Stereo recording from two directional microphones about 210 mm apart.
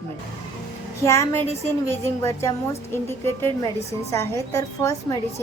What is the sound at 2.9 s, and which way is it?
A woman's voice, 10° left (ahead or behind).